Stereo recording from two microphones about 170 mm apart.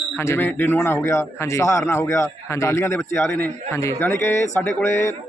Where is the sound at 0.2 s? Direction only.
15° left (ahead or behind).